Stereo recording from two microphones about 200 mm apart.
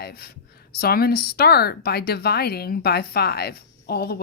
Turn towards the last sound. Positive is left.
turn(degrees=50)  # may be behind; listen again after turning